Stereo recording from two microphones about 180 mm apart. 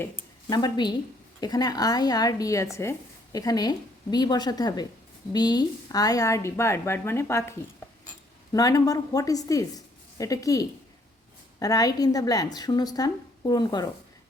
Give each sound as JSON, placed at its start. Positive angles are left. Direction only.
{"t": 0.5, "sound": "a woman's voice", "side_deg": 25}
{"t": 8.5, "sound": "a woman's voice", "side_deg": 20}